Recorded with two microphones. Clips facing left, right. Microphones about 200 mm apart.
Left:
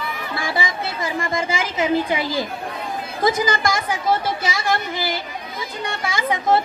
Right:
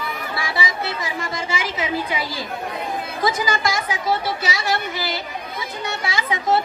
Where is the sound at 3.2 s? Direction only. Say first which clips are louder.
Left 3 dB; 50° left (ahead or behind).